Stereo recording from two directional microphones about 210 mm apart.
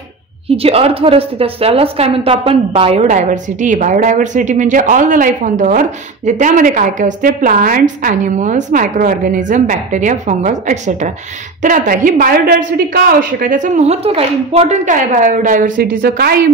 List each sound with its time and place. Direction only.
0.5 s a woman's voice: 30° right (ahead or behind); by 16.3 s 45° right (ahead or behind)